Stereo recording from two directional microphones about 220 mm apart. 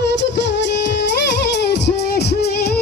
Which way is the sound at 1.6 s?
50° left (ahead or behind).